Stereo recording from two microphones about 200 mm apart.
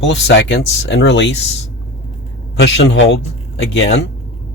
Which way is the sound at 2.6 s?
65° left (ahead or behind).